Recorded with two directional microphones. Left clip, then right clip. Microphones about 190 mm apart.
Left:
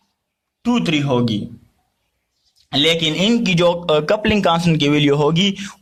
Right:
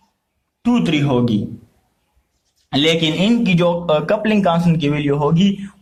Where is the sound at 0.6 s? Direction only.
30° left (ahead or behind).